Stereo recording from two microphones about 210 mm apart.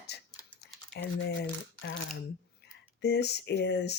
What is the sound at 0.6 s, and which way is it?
Typing, 50° left (ahead or behind).